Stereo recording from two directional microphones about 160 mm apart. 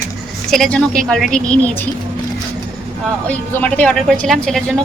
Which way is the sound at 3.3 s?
10° left (ahead or behind).